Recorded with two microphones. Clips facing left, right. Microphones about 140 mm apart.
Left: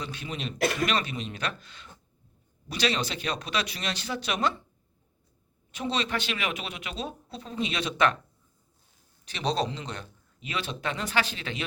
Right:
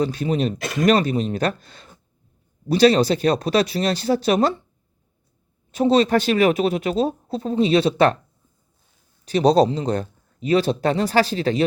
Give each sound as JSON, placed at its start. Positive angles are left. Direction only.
{"t": 0.0, "sound": "speech", "side_deg": -40}
{"t": 5.7, "sound": "speech", "side_deg": -40}
{"t": 9.2, "sound": "speech", "side_deg": -40}